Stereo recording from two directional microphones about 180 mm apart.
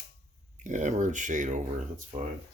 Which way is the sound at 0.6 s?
45° right (ahead or behind).